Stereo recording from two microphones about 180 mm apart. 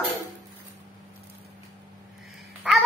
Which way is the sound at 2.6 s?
5° right (ahead or behind).